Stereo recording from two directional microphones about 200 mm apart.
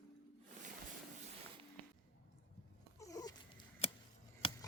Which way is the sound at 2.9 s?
15° left (ahead or behind).